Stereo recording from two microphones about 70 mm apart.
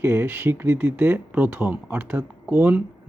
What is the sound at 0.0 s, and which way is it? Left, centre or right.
Speech, right.